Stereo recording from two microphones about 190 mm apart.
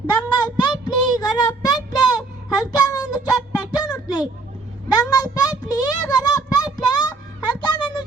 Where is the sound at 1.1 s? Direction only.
20° left (ahead or behind).